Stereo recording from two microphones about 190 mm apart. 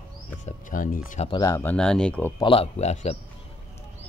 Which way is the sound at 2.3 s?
30° left (ahead or behind).